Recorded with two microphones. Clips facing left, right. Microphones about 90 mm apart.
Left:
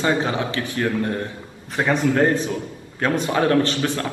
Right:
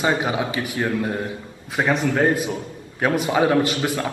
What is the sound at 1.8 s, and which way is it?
A man's voice, 5° right (ahead or behind).